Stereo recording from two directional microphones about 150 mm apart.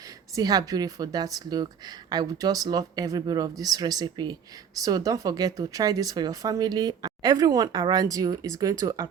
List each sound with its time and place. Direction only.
0.3 s speech: 25° right (ahead or behind)